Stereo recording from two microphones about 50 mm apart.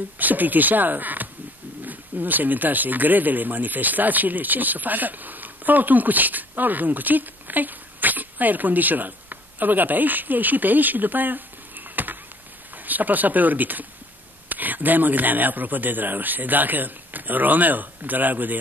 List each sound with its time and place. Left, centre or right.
0.2 s speech: right